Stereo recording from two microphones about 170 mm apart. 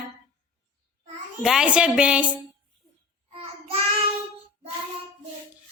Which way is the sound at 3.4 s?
35° right (ahead or behind).